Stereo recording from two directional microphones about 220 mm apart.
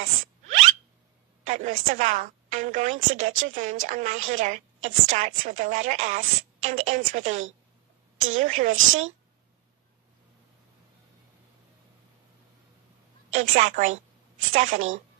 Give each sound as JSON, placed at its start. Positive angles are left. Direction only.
{"t": 0.0, "sound": "a sound", "side_deg": -35}
{"t": 1.4, "sound": "speech", "side_deg": -35}
{"t": 13.3, "sound": "speech", "side_deg": -35}